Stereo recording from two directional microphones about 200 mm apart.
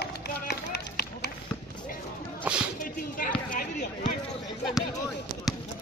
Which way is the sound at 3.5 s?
40° left (ahead or behind).